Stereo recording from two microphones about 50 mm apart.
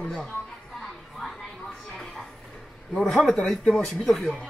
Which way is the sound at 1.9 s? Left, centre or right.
Centre.